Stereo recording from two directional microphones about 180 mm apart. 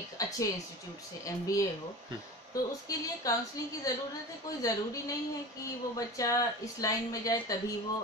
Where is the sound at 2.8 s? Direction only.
20° left (ahead or behind).